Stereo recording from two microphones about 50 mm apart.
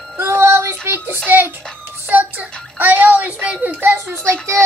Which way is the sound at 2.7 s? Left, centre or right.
Right.